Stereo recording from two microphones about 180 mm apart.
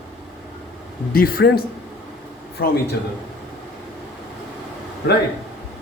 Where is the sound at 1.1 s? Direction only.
55° left (ahead or behind).